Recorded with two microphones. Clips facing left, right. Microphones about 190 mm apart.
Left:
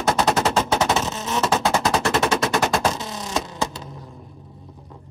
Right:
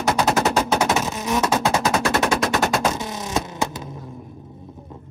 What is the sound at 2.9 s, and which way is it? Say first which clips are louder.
Vehicle: right 2 dB; 20° right (ahead or behind).